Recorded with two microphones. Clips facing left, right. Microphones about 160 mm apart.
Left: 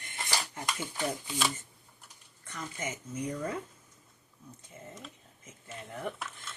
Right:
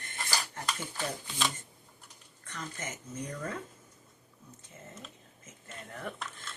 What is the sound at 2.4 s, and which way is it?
Speech, 10° left (ahead or behind).